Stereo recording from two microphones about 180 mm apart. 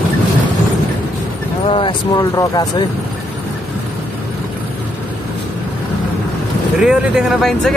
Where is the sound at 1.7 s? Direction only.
30° left (ahead or behind).